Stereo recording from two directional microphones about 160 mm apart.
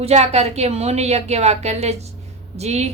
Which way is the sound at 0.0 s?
40° right (ahead or behind).